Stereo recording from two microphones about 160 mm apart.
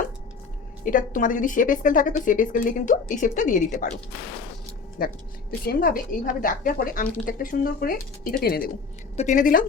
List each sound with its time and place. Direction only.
0.9 s a woman's voice: 55° left (ahead or behind)
5.0 s a woman's voice: 65° left (ahead or behind)
9.1 s a woman's voice: 50° left (ahead or behind)